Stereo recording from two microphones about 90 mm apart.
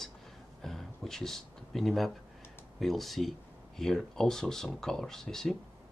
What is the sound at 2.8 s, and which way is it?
Speech, centre (ahead or behind).